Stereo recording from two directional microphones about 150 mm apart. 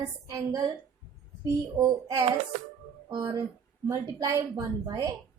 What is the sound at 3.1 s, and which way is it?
Speech, 30° right (ahead or behind).